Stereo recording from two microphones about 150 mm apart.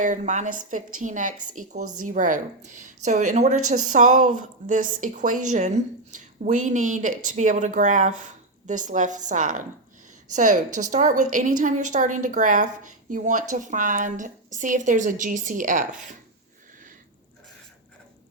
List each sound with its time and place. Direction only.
0.0 s a woman's voice: 55° right (ahead or behind)